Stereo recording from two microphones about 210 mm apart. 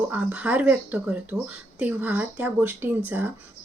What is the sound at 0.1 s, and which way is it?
A woman's voice, 5° right (ahead or behind).